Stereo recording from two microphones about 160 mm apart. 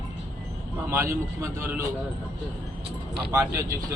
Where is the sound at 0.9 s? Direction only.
15° right (ahead or behind).